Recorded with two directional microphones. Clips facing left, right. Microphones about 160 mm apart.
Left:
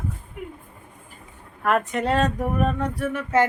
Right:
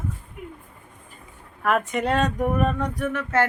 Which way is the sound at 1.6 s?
Centre (ahead or behind).